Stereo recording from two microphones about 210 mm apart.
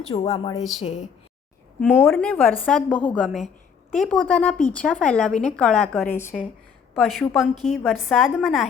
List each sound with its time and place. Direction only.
0.1 s a woman's voice: 25° left (ahead or behind)
1.8 s a woman's voice: 10° left (ahead or behind)